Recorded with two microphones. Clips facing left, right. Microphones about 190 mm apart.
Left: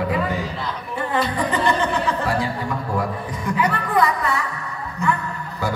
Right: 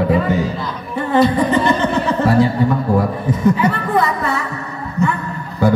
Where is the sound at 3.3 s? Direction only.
25° right (ahead or behind).